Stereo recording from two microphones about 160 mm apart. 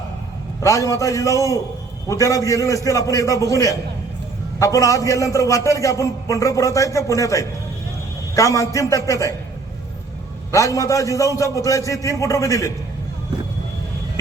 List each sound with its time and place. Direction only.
0.6 s a man's voice: 20° left (ahead or behind)
10.5 s a man's voice: 20° left (ahead or behind)